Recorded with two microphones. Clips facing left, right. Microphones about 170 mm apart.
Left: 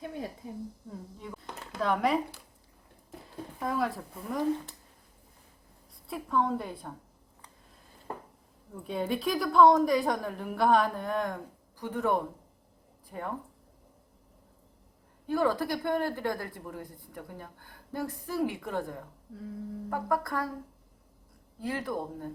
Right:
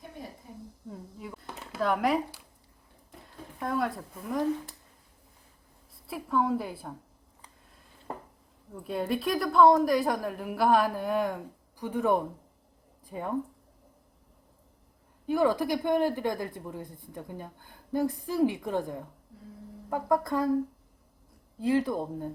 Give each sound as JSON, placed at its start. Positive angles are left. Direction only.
{"t": 0.9, "sound": "a sound", "side_deg": -5}
{"t": 3.6, "sound": "a woman's voice", "side_deg": 0}
{"t": 6.1, "sound": "a woman's voice", "side_deg": 0}
{"t": 8.7, "sound": "a woman's voice", "side_deg": 0}
{"t": 15.3, "sound": "speech", "side_deg": -15}
{"t": 21.6, "sound": "speech", "side_deg": -25}